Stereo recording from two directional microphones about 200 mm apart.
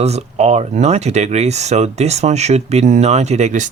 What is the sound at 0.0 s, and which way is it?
Speech, 30° right (ahead or behind).